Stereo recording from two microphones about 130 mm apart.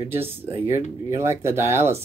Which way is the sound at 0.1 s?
15° right (ahead or behind).